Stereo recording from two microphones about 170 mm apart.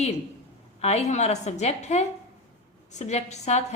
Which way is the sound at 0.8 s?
40° left (ahead or behind).